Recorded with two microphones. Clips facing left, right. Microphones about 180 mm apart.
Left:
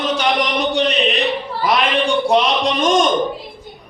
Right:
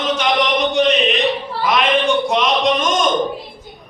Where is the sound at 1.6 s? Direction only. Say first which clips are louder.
Right 1 dB; 35° left (ahead or behind).